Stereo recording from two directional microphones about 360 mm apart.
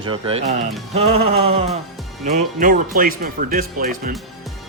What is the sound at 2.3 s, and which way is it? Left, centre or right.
Speech, right.